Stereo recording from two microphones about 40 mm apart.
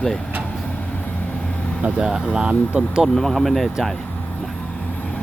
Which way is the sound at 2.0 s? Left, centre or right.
Centre.